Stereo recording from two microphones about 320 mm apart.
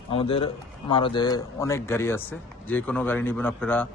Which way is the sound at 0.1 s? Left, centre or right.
Centre.